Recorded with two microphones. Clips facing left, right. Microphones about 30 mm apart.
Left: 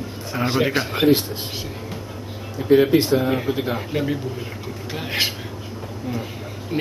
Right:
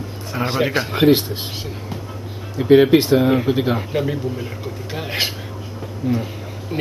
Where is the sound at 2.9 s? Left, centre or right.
Right.